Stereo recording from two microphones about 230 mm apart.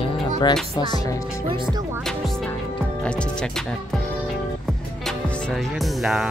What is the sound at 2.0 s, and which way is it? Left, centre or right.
Music, centre.